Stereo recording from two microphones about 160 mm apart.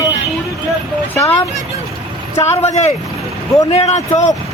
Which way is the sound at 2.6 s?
45° left (ahead or behind).